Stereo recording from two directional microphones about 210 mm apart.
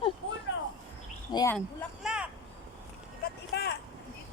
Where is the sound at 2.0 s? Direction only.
5° right (ahead or behind).